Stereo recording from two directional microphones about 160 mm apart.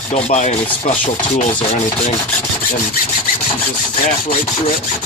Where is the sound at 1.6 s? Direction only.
40° left (ahead or behind).